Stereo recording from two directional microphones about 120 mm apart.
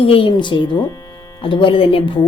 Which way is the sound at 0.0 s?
50° left (ahead or behind).